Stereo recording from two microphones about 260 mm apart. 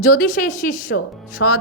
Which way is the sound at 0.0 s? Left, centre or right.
Left.